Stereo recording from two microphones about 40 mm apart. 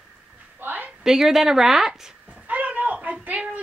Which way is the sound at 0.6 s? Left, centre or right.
Right.